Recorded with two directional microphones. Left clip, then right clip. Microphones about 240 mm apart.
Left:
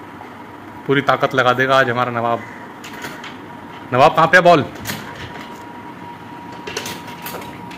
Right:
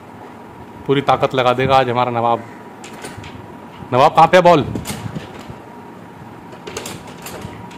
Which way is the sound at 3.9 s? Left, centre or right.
Centre.